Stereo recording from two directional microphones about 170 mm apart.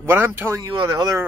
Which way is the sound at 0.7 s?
25° right (ahead or behind).